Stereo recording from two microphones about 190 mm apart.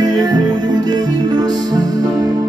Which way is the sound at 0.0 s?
20° right (ahead or behind).